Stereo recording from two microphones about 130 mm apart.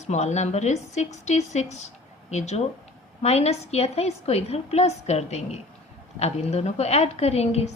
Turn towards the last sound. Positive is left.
turn(degrees=55)  # may be behind; listen again after turning